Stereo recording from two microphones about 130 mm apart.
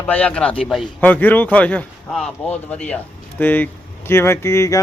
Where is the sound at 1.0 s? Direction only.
15° left (ahead or behind).